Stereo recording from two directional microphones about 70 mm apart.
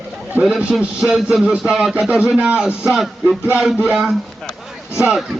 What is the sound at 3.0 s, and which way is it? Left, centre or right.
Music, centre.